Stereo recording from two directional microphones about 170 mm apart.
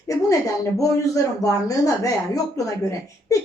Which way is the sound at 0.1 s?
20° left (ahead or behind).